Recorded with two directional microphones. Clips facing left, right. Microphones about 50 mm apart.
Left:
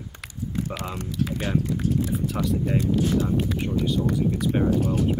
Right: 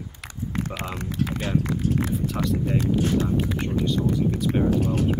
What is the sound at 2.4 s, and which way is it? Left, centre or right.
Speech, centre.